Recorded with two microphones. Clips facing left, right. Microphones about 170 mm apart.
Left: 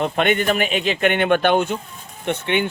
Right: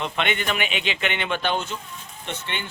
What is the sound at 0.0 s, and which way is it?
Speech, 45° left (ahead or behind).